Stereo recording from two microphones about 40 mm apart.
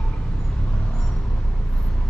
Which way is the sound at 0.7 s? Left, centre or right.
Left.